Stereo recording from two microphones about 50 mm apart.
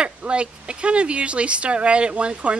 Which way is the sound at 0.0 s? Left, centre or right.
Right.